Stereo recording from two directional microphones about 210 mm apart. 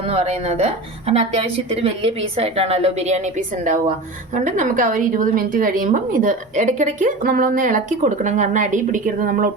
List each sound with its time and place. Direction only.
0.1 s a woman's voice: 30° right (ahead or behind)